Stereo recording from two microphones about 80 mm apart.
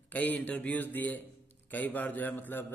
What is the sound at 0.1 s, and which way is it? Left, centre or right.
A man's voice, centre.